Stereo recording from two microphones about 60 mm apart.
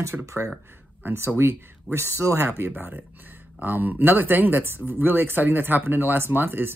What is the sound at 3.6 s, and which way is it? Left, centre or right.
Speech, right.